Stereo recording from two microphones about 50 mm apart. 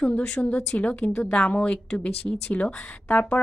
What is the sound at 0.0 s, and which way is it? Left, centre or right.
A woman's voice, left.